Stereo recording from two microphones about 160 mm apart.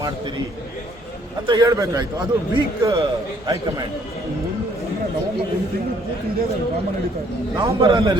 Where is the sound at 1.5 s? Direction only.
20° right (ahead or behind).